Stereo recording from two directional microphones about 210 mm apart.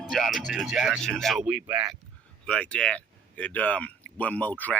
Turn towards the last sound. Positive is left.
turn(degrees=5)  # may be behind; listen again after turning